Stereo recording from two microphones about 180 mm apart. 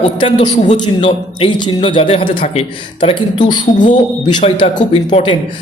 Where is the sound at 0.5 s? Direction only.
40° left (ahead or behind).